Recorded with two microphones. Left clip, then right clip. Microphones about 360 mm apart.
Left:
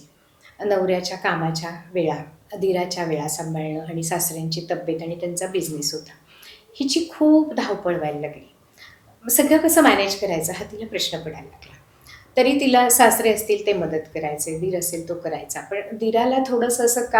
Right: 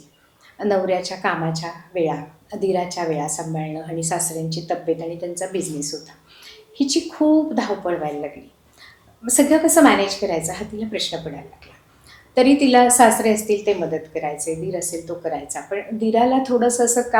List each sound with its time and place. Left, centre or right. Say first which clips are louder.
0.6 s a woman's voice: right 1 dB; right
6.4 s a sound: right 3 dB; right
7.2 s a woman's voice: left 1 dB; right
9.2 s a woman's voice: right 1 dB; right
12.3 s a woman's voice: right 2 dB; right